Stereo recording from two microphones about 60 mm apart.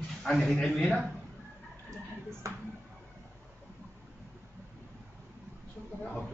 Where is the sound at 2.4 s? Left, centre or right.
Right.